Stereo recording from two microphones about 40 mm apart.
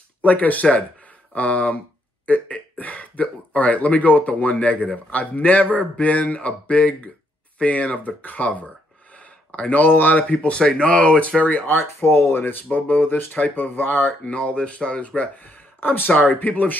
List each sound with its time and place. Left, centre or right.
0.2 s speech: left
9.1 s a sound: left
9.8 s speech: left
10.3 s speech: left
11.6 s speech: left
12.7 s speech: left
14.2 s speech: left
15.0 s speech: left
16.3 s speech: left